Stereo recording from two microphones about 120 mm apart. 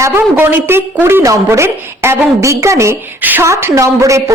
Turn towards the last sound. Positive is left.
turn(degrees=-25)  # may be behind; listen again after turning